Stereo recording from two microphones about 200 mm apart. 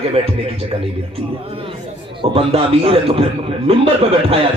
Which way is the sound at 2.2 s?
25° right (ahead or behind).